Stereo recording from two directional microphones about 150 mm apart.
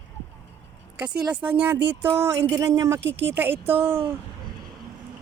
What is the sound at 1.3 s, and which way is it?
Speech, 10° right (ahead or behind).